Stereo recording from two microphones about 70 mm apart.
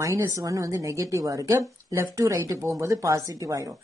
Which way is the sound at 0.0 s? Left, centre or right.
Right.